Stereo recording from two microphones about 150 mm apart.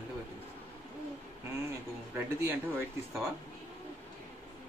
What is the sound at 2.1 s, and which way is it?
Speech, 15° right (ahead or behind).